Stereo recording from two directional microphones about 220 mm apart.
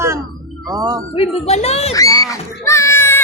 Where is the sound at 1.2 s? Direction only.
30° left (ahead or behind).